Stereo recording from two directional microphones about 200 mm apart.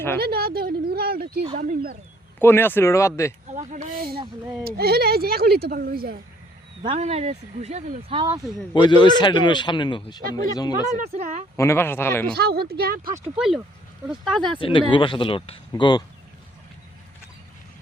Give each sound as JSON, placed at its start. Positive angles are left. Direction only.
{"t": 0.2, "sound": "a sound", "side_deg": -50}
{"t": 1.5, "sound": "speech", "side_deg": -45}
{"t": 2.4, "sound": "speech", "side_deg": 10}
{"t": 3.5, "sound": "speech", "side_deg": -40}
{"t": 6.8, "sound": "speech", "side_deg": -30}
{"t": 8.7, "sound": "a man's voice", "side_deg": 25}
{"t": 11.1, "sound": "speech", "side_deg": -30}
{"t": 11.5, "sound": "speech", "side_deg": 15}
{"t": 12.4, "sound": "speech", "side_deg": -50}
{"t": 13.3, "sound": "speech", "side_deg": -5}
{"t": 14.6, "sound": "a man's voice", "side_deg": 25}